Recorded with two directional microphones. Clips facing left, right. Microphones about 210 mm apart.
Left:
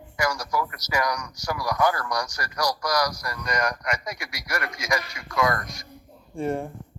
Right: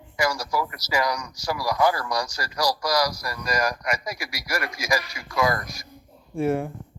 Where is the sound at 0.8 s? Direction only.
30° right (ahead or behind).